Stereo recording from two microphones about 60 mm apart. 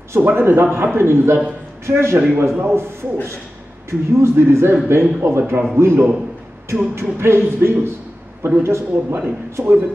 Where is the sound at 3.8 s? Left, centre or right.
Right.